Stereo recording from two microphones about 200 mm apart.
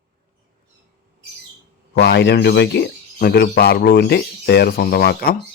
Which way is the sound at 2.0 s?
60° left (ahead or behind).